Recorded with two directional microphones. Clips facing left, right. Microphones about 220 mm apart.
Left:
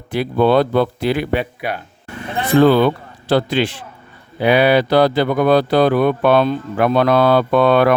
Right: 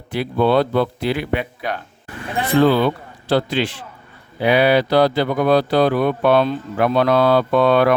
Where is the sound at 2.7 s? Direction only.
60° left (ahead or behind).